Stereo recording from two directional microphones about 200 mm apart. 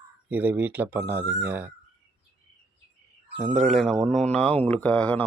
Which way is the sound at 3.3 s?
35° right (ahead or behind).